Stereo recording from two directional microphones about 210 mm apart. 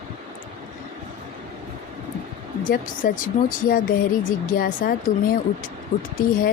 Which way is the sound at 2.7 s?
40° left (ahead or behind).